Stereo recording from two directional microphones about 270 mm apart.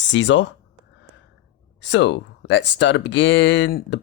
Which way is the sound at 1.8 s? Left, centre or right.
Left.